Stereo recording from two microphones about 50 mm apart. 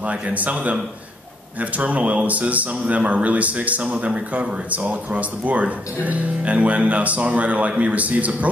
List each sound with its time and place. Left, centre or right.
0.1 s speech: right